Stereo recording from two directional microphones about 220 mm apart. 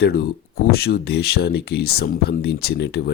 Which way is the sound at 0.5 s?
45° left (ahead or behind).